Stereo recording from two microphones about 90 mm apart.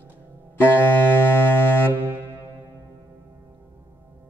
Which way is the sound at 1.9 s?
25° right (ahead or behind).